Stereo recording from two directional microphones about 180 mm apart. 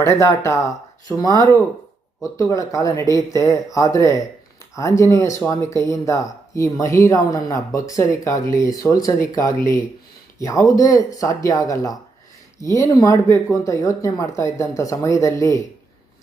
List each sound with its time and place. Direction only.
0.0 s speech: 15° left (ahead or behind)